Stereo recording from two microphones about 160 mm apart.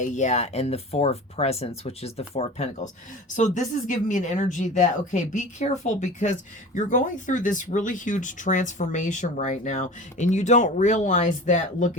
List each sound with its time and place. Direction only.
0.0 s speech: 50° left (ahead or behind)